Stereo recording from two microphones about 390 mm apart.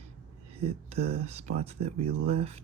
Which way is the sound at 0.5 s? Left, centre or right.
Centre.